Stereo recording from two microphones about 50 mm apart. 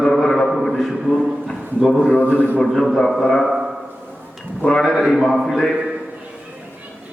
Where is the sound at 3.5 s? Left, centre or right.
Centre.